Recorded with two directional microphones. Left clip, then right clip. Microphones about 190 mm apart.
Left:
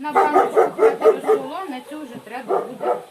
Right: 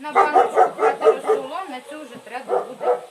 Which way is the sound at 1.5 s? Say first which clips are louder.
Even; 10° left (ahead or behind).